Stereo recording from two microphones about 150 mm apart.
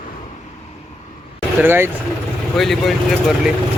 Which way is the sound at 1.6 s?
15° right (ahead or behind).